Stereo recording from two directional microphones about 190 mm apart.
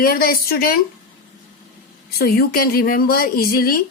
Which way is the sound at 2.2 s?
50° left (ahead or behind).